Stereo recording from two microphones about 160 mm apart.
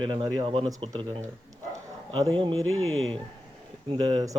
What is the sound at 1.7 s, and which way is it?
Bow-wow, 30° right (ahead or behind).